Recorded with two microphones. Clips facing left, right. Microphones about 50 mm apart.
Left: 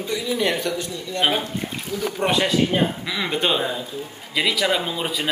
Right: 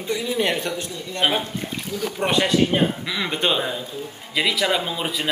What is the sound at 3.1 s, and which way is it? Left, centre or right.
Speech, centre.